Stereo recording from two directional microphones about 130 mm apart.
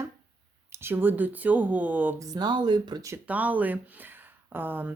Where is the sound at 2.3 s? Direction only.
35° right (ahead or behind).